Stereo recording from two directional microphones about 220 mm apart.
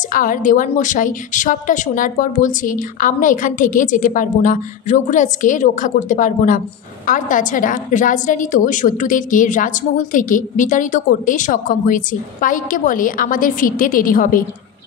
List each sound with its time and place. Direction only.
0.1 s a woman's voice: 40° left (ahead or behind)